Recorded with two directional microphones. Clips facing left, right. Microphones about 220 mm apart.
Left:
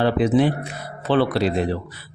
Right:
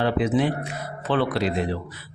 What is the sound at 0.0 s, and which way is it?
A man's voice, 35° left (ahead or behind).